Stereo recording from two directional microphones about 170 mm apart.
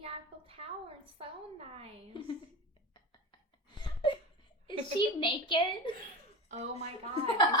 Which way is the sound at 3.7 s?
25° left (ahead or behind).